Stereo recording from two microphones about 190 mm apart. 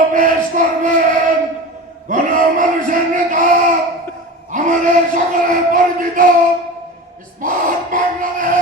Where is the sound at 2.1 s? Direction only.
45° right (ahead or behind).